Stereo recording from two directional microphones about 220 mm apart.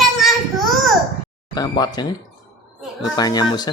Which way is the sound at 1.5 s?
20° left (ahead or behind).